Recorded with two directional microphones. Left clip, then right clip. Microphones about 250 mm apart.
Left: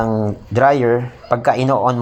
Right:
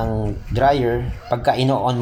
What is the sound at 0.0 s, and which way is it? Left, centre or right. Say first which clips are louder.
A man's voice: left 5 dB; left.